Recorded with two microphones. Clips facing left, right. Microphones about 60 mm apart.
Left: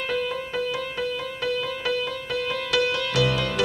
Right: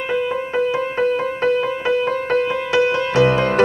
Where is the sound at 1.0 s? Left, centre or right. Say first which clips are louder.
Right 12 dB; right.